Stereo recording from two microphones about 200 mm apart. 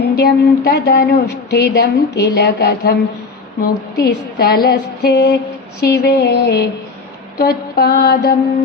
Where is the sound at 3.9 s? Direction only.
50° left (ahead or behind).